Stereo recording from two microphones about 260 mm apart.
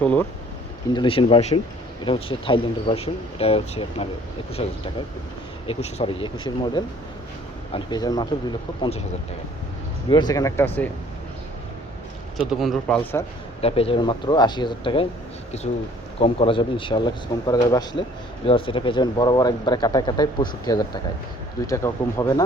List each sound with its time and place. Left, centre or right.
0.0 s speech: centre
0.9 s speech: centre
10.1 s speech: centre
12.5 s speech: centre
13.6 s speech: left